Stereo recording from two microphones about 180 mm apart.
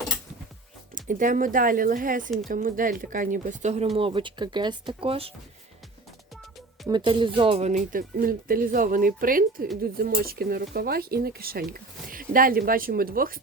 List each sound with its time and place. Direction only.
0.9 s speech: 45° right (ahead or behind)
3.9 s speech: 30° right (ahead or behind)
6.8 s speech: 25° right (ahead or behind); by 13.4 s 55° right (ahead or behind)